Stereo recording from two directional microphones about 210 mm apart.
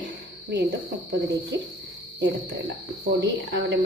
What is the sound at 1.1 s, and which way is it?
Speech, 55° right (ahead or behind).